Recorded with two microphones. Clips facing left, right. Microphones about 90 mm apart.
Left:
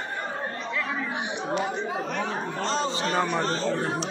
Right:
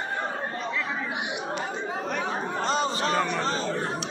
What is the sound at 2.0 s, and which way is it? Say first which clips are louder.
Chatter: even; 5° right (ahead or behind).